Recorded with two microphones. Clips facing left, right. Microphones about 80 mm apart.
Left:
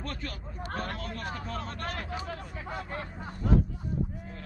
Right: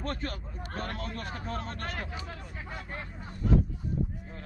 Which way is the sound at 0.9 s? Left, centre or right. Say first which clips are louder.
Left 1 dB; right.